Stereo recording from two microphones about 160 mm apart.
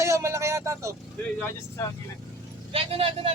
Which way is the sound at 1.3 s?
15° left (ahead or behind).